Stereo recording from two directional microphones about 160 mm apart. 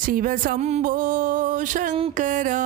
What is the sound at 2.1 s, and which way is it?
Speech, 55° right (ahead or behind).